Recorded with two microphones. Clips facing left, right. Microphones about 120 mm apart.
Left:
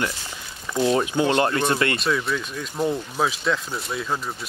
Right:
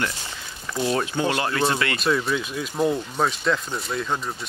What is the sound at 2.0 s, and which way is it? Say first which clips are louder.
Speech: right 1 dB; centre (ahead or behind).